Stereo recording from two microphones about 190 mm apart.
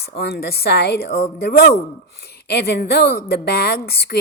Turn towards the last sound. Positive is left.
turn(degrees=55)  # may be behind; listen again after turning